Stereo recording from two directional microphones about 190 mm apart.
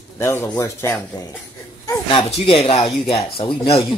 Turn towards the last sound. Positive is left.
turn(degrees=25)  # may be behind; listen again after turning